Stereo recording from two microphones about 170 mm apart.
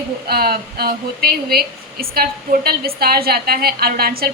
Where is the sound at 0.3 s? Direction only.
65° right (ahead or behind).